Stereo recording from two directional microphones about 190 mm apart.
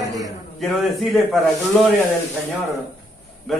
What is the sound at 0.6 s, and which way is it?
Speech, centre (ahead or behind).